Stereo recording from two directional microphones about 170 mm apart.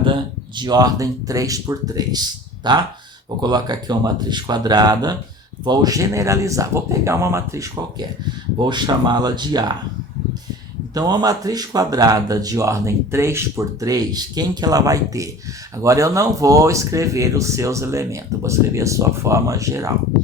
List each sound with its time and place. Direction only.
0.5 s speech: 25° right (ahead or behind)
10.9 s speech: 20° right (ahead or behind)